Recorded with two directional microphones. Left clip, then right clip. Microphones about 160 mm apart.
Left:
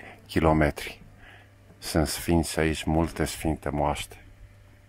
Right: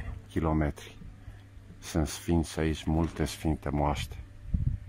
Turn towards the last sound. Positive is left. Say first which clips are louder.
# left 3 dB
turn(degrees=15)  # may be behind; listen again after turning